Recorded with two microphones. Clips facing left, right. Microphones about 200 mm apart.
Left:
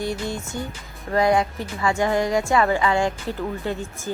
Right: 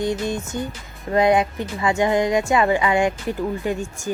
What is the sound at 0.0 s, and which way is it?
Speech, 20° right (ahead or behind).